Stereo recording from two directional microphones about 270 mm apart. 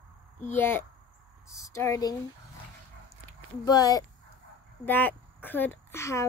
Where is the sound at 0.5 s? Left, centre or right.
Centre.